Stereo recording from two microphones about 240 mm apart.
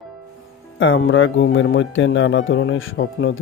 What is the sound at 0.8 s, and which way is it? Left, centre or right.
Speech, left.